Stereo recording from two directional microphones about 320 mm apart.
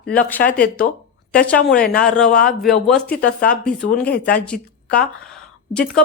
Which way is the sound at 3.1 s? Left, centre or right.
Left.